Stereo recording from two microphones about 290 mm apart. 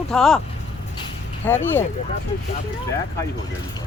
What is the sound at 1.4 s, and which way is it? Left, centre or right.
Speech, centre.